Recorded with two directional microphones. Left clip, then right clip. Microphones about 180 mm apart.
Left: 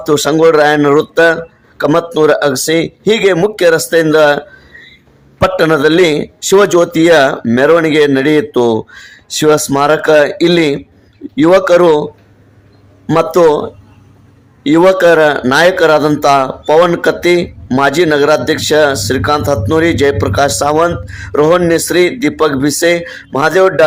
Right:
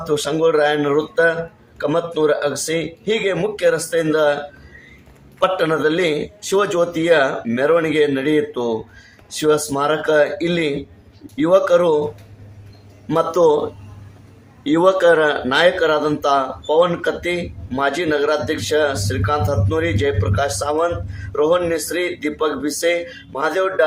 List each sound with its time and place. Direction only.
0.0 s a man's voice: 50° left (ahead or behind)
5.4 s a man's voice: 45° left (ahead or behind)
13.1 s speech: 40° left (ahead or behind)
14.6 s a man's voice: 35° left (ahead or behind)